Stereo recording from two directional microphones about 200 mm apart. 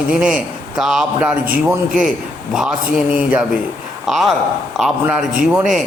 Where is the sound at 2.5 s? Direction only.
5° right (ahead or behind).